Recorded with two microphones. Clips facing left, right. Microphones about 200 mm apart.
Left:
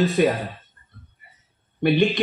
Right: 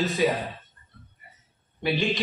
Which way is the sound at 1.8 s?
55° left (ahead or behind).